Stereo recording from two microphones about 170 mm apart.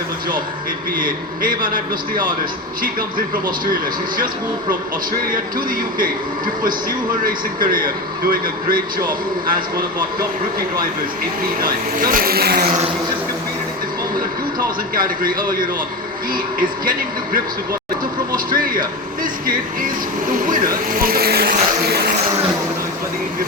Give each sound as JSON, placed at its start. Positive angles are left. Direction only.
{"t": 1.4, "sound": "speech", "side_deg": -55}
{"t": 5.3, "sound": "speech", "side_deg": -55}
{"t": 11.9, "sound": "speech", "side_deg": -55}
{"t": 14.9, "sound": "speech", "side_deg": -55}
{"t": 20.3, "sound": "speech", "side_deg": -55}